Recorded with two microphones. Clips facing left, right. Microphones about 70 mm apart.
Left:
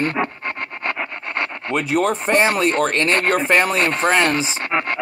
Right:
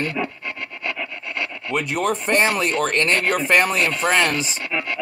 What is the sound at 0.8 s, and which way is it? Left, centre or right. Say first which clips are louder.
Rub: left 3 dB; left.